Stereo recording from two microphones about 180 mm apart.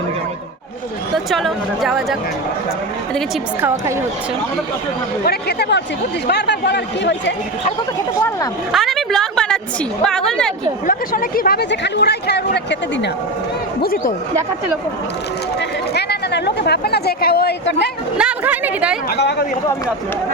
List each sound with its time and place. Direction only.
1.1 s speech: centre (ahead or behind)
5.2 s speech: 65° left (ahead or behind)
8.7 s a woman's voice: centre (ahead or behind)
10.8 s speech: 50° left (ahead or behind); by 13.1 s 70° left (ahead or behind)
13.8 s speech: 55° left (ahead or behind)
16.0 s speech: 65° left (ahead or behind)
18.2 s speech: 10° right (ahead or behind)
19.1 s speech: 65° left (ahead or behind)